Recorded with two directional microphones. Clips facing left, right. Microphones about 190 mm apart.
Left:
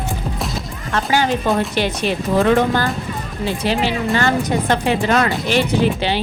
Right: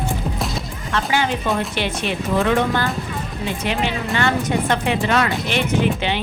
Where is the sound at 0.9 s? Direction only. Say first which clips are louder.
Left 3 dB; 40° left (ahead or behind).